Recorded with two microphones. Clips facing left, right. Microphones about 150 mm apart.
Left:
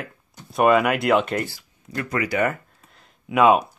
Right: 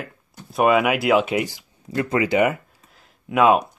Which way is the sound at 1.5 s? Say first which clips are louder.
Right 6 dB; 25° right (ahead or behind).